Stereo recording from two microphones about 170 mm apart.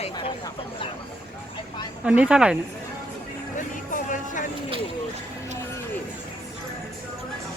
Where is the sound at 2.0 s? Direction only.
5° right (ahead or behind).